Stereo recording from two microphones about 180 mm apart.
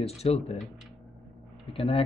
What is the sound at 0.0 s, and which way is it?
Speech, 35° left (ahead or behind).